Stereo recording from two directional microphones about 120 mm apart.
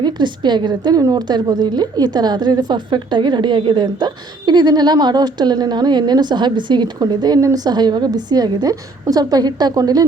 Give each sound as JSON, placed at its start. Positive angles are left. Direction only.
{"t": 0.0, "sound": "a woman's voice", "side_deg": -40}